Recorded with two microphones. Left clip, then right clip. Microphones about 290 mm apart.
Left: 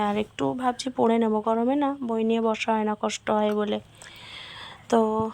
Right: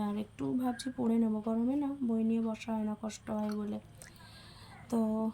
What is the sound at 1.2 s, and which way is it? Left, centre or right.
Speech, left.